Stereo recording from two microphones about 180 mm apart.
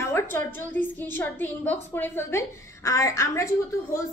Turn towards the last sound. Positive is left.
turn(degrees=15)  # may be behind; listen again after turning